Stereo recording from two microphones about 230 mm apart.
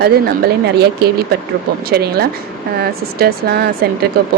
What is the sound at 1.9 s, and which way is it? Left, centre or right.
Speech, right.